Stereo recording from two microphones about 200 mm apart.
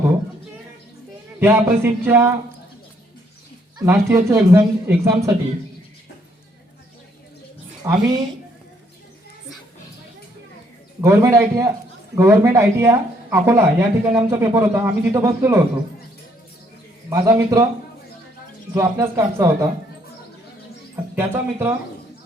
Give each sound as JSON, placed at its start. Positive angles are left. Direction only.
{"t": 1.4, "sound": "speech", "side_deg": -10}
{"t": 3.8, "sound": "speech", "side_deg": -15}
{"t": 7.8, "sound": "speech", "side_deg": -15}
{"t": 11.0, "sound": "speech", "side_deg": -15}
{"t": 17.1, "sound": "speech", "side_deg": -15}
{"t": 18.7, "sound": "speech", "side_deg": -15}
{"t": 20.9, "sound": "speech", "side_deg": -10}